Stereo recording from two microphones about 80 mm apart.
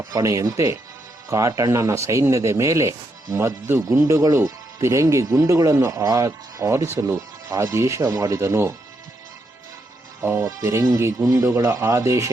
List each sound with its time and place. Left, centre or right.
0.0 s speech: right
10.2 s speech: right